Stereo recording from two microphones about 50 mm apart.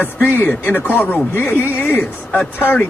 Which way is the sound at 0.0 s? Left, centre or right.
Left.